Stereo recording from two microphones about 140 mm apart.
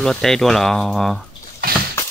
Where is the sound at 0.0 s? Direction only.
5° left (ahead or behind).